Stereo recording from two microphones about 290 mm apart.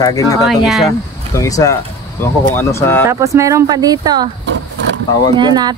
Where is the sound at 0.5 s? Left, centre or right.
Centre.